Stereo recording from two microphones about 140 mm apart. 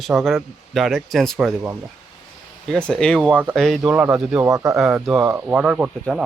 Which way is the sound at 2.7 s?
5° left (ahead or behind).